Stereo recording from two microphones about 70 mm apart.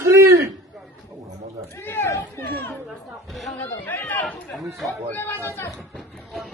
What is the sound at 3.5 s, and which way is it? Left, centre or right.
Speech, left.